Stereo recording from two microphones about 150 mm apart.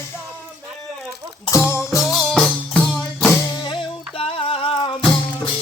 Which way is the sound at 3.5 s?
30° left (ahead or behind).